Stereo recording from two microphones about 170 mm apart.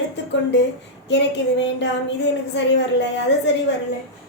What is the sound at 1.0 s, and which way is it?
A woman's voice, 90° left.